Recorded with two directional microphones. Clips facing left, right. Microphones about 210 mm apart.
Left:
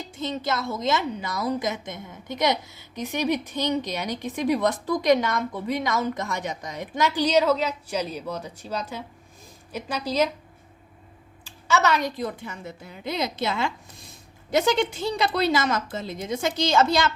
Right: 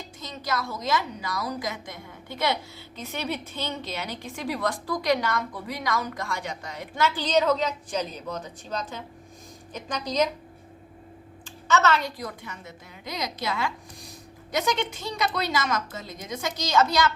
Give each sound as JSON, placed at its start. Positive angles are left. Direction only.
{"t": 0.2, "sound": "a woman's voice", "side_deg": 25}
{"t": 11.4, "sound": "a woman's voice", "side_deg": 10}